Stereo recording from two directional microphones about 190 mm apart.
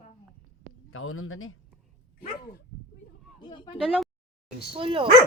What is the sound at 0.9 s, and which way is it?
Speech, 90° left.